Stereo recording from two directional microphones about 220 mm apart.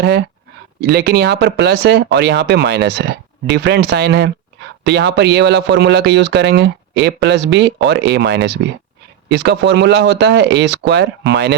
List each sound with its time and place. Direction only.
0.0 s speech: 50° right (ahead or behind)